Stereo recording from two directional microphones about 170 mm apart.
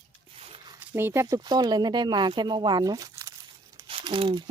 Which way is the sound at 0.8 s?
15° right (ahead or behind).